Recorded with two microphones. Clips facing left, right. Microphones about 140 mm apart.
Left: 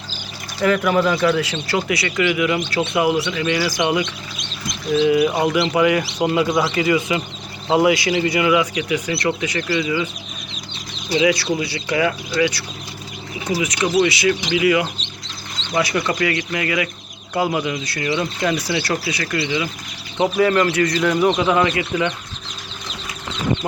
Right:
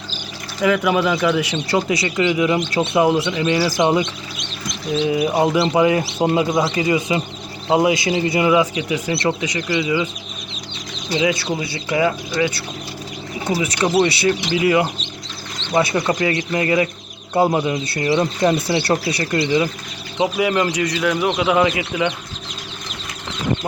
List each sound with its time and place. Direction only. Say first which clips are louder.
0.6 s speech: even; 10° right (ahead or behind)
3.6 s speech: right 4 dB; 35° right (ahead or behind)
5.0 s speech: even; 25° right (ahead or behind)
11.2 s speech: left 2 dB; 20° right (ahead or behind); by 14.8 s 35° right (ahead or behind)
15.7 s speech: right 2 dB; 25° right (ahead or behind)
20.1 s speech: left 2 dB; 10° right (ahead or behind)